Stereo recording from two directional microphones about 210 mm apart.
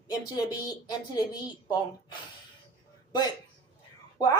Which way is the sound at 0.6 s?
20° left (ahead or behind).